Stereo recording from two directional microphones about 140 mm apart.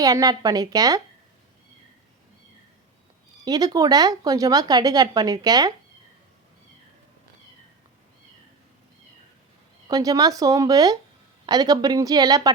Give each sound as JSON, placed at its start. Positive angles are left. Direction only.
{"t": 0.0, "sound": "speech", "side_deg": -25}
{"t": 3.4, "sound": "speech", "side_deg": -25}
{"t": 9.9, "sound": "speech", "side_deg": -25}